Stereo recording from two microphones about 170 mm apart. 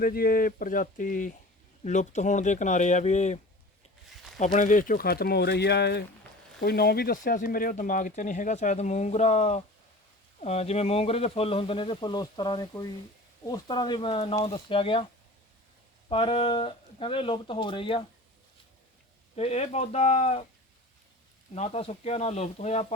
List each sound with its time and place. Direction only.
0.0 s speech: 60° left (ahead or behind); by 3.4 s 40° left (ahead or behind)
4.1 s a sound: centre (ahead or behind)
4.5 s speech: 50° left (ahead or behind); by 15.0 s 30° left (ahead or behind)
16.0 s speech: 30° left (ahead or behind)
19.4 s speech: 40° left (ahead or behind)
21.5 s speech: 40° left (ahead or behind)